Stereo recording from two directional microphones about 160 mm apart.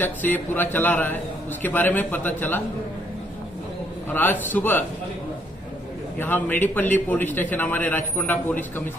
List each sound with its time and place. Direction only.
0.0 s a man's voice: 10° left (ahead or behind)
4.1 s a man's voice: 10° left (ahead or behind)
6.1 s a man's voice: 10° left (ahead or behind)